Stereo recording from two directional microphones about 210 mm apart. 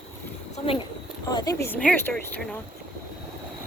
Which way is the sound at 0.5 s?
25° left (ahead or behind).